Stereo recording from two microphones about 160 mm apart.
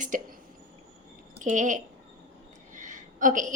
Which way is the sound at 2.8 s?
55° right (ahead or behind).